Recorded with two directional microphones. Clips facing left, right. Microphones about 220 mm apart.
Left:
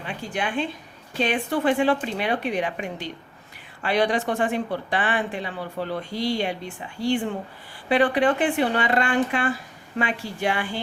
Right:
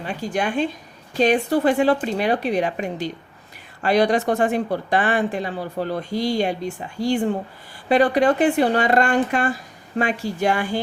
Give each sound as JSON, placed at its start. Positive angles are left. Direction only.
{"t": 0.0, "sound": "a woman's voice", "side_deg": -40}